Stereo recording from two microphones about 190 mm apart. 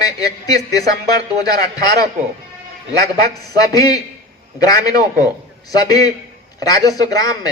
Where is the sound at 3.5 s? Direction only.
20° left (ahead or behind).